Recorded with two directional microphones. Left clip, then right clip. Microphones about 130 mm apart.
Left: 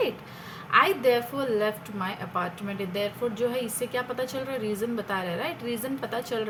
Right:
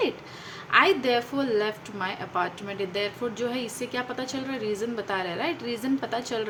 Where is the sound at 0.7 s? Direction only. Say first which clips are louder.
Even; 30° right (ahead or behind).